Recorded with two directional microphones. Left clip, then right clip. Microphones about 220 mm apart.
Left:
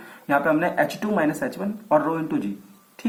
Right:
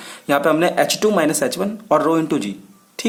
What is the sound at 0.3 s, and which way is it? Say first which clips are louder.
Speech: right 5 dB; 45° right (ahead or behind).